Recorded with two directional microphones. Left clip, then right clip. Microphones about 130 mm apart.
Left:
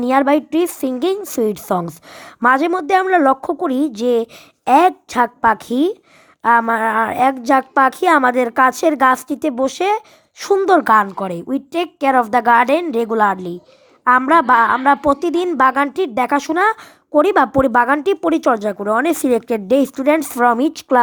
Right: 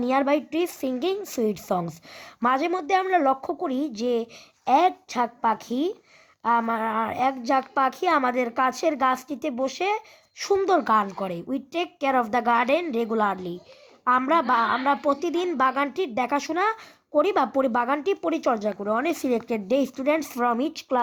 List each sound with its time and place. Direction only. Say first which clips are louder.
0.0 s a woman's voice: left 8 dB; 40° left (ahead or behind)